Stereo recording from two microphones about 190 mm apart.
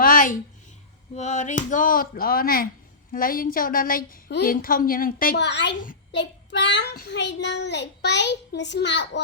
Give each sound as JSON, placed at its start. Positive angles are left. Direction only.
{"t": 0.0, "sound": "a sound", "side_deg": 45}
{"t": 1.1, "sound": "a woman's voice", "side_deg": 35}
{"t": 6.1, "sound": "child singing", "side_deg": 70}
{"t": 7.1, "sound": "a child's voice", "side_deg": 65}